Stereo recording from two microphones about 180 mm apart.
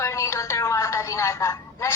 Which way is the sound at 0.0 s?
15° left (ahead or behind).